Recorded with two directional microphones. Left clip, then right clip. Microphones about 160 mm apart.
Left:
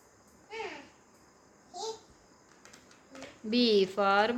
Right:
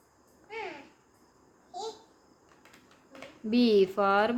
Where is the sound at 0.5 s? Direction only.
Centre (ahead or behind).